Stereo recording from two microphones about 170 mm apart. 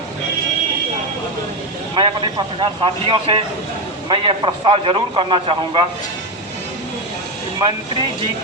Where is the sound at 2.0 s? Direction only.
30° right (ahead or behind).